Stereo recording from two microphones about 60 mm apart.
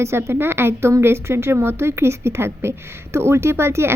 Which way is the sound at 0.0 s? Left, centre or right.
Right.